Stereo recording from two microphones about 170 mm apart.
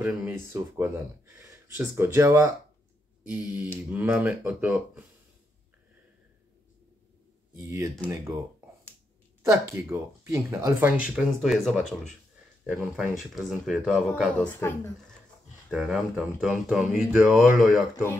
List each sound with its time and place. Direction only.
0.0 s speech: 15° right (ahead or behind)
7.7 s speech: 20° right (ahead or behind)
9.4 s speech: 15° right (ahead or behind); by 14.3 s centre (ahead or behind)
14.4 s a woman's voice: 10° left (ahead or behind)
15.7 s speech: 5° right (ahead or behind)